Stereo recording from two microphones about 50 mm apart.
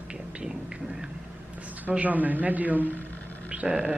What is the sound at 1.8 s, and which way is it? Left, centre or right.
A man's voice, right.